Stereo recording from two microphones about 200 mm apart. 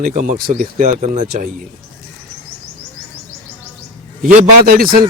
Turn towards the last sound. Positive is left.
turn(degrees=-45)  # may be behind; listen again after turning